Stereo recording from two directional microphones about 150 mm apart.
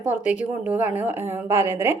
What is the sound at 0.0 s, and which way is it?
A woman's voice, 10° right (ahead or behind).